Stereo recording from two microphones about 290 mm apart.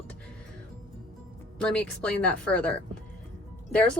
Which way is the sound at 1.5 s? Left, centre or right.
Centre.